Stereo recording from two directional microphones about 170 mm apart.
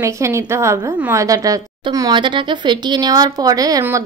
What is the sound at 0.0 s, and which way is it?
A woman's voice, 15° right (ahead or behind).